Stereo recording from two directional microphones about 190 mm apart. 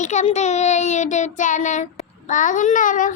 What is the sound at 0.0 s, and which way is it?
A child's voice, 40° left (ahead or behind).